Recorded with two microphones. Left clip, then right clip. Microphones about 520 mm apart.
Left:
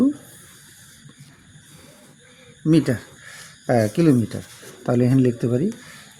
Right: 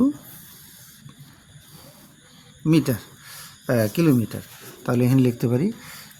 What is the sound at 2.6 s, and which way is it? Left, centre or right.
Speech, right.